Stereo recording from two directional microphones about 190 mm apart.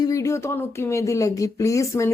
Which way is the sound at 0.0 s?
15° left (ahead or behind).